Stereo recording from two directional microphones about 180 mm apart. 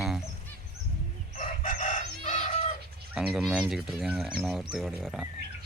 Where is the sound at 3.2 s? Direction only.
Centre (ahead or behind).